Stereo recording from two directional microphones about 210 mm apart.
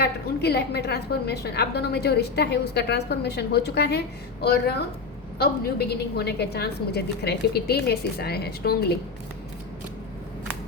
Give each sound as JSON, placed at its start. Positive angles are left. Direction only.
{"t": 0.0, "sound": "a woman's voice", "side_deg": 50}